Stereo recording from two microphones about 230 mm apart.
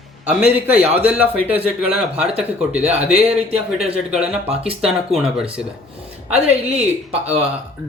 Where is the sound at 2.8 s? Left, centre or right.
Right.